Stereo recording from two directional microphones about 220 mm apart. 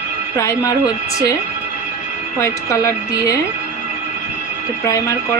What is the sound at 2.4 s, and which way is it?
A woman's voice, 10° left (ahead or behind).